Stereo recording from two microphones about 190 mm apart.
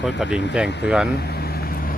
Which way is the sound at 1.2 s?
55° left (ahead or behind).